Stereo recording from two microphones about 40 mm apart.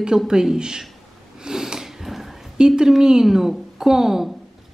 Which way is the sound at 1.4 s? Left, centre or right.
Centre.